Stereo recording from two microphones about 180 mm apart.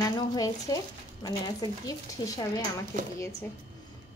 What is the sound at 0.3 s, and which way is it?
Speech, 20° left (ahead or behind).